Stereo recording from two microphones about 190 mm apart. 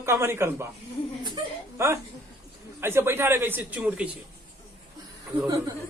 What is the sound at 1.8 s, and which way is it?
Speech, 15° right (ahead or behind).